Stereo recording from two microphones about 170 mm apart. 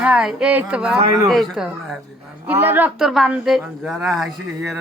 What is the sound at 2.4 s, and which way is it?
Speech, 10° right (ahead or behind).